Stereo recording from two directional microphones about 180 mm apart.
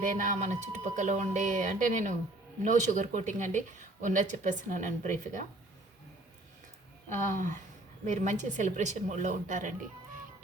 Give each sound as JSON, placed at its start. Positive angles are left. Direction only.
{"t": 0.0, "sound": "speech", "side_deg": -45}
{"t": 7.1, "sound": "speech", "side_deg": -45}